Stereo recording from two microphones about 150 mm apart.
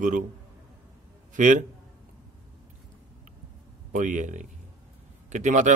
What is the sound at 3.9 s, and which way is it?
A man's voice, 55° right (ahead or behind).